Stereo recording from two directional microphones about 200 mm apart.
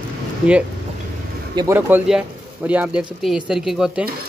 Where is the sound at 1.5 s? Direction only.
15° right (ahead or behind).